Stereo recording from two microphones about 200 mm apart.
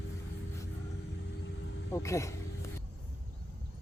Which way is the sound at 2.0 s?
15° left (ahead or behind).